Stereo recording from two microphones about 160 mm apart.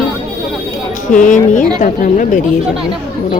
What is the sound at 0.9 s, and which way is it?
Speech, 55° left (ahead or behind).